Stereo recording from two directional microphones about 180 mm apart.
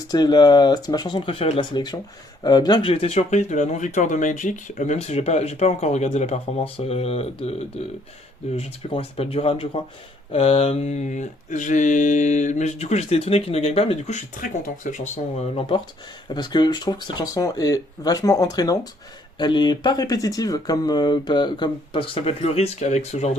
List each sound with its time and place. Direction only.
0.1 s speech: 25° left (ahead or behind)
2.9 s mantra: 35° left (ahead or behind)
8.5 s mantra: 30° left (ahead or behind)
16.3 s speech: 25° left (ahead or behind)